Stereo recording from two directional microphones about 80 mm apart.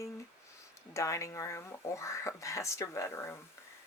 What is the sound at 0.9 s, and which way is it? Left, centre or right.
Speech, left.